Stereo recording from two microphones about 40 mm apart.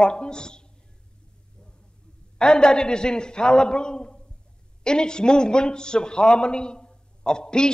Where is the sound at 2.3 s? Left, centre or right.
Left.